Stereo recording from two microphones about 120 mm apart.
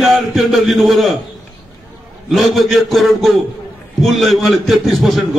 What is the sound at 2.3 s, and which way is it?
A man's voice, centre (ahead or behind).